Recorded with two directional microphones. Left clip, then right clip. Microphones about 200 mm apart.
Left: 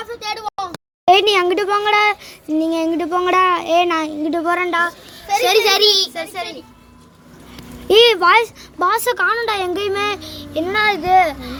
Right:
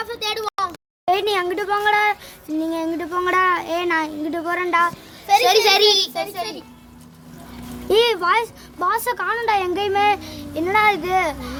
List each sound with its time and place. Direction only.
0.2 s a sound: 25° right (ahead or behind)
1.0 s a child's voice: 30° left (ahead or behind)
5.6 s a child's voice: 5° left (ahead or behind)
7.9 s speech: 20° left (ahead or behind); by 11.5 s centre (ahead or behind)